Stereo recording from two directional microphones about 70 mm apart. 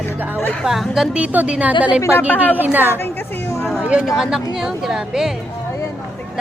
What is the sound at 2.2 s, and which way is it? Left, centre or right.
Speech, left.